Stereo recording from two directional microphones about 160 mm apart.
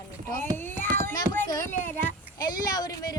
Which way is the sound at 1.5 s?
20° left (ahead or behind).